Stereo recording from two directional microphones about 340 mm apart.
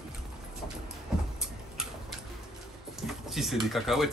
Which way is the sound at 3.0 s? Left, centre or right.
Centre.